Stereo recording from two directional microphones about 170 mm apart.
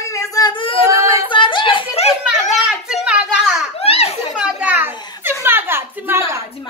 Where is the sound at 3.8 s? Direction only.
35° left (ahead or behind).